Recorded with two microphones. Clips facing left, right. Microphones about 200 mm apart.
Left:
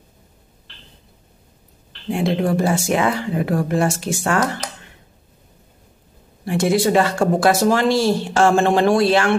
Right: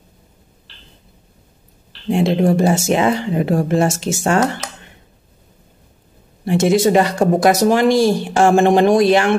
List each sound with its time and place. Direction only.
1.9 s speech: 25° right (ahead or behind)
6.4 s speech: 20° right (ahead or behind)